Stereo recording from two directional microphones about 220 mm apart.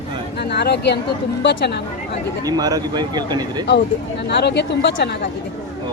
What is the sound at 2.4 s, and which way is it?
Speech, 15° right (ahead or behind).